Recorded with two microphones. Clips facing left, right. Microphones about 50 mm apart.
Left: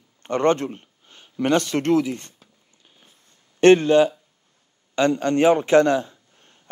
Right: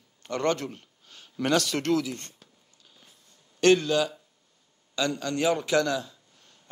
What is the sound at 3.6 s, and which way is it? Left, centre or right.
A man's voice, left.